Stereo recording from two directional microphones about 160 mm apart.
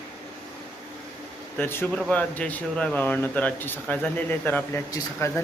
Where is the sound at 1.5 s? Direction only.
15° left (ahead or behind).